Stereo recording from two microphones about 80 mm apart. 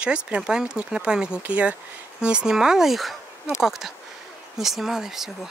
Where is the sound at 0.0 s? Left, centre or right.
Centre.